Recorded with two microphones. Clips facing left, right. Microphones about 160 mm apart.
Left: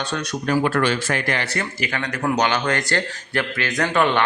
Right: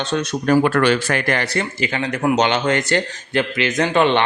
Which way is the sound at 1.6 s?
25° right (ahead or behind).